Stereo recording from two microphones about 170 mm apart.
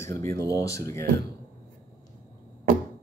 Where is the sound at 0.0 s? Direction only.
15° left (ahead or behind).